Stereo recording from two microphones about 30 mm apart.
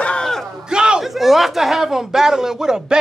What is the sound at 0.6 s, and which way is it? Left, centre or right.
Speech, right.